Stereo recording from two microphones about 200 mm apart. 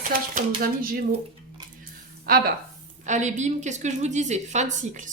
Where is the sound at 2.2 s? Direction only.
50° right (ahead or behind).